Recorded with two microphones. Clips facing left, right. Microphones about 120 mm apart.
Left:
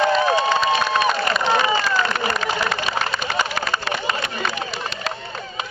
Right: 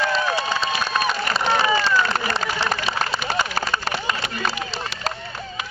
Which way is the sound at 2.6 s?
35° right (ahead or behind).